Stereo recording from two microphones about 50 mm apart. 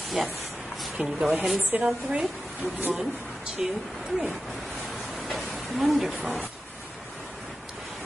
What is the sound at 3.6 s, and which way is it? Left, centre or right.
Speech, centre.